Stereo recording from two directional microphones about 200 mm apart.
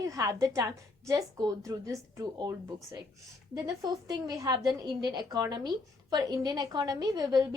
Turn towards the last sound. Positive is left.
turn(degrees=-20)  # may be behind; listen again after turning